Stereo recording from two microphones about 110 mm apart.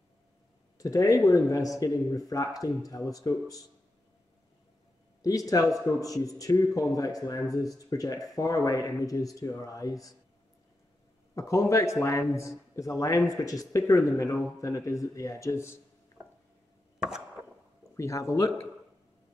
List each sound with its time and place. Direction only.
0.7 s speech: 30° left (ahead or behind)
5.2 s speech: 35° left (ahead or behind)
11.3 s speech: 30° left (ahead or behind)
17.0 s a sound: 5° right (ahead or behind)
17.9 s speech: 30° left (ahead or behind)